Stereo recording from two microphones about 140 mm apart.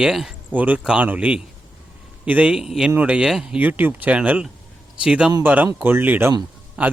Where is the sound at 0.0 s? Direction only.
5° right (ahead or behind).